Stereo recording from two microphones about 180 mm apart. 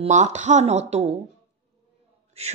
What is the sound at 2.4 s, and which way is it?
Mantra, 35° right (ahead or behind).